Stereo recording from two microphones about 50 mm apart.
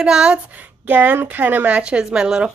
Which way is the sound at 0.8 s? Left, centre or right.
Right.